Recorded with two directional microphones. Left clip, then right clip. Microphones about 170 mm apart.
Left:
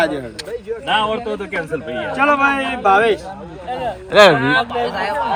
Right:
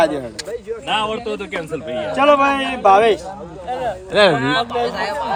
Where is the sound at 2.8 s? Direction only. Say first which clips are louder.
Right 2 dB; 40° right (ahead or behind).